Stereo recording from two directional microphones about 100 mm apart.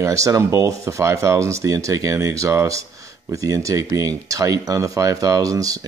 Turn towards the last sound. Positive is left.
turn(degrees=-35)  # may be behind; listen again after turning